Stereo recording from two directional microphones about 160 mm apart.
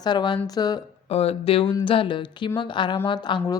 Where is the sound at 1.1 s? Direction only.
40° left (ahead or behind).